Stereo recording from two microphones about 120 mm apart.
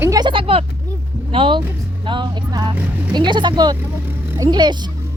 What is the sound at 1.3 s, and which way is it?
Vehicle, 45° right (ahead or behind).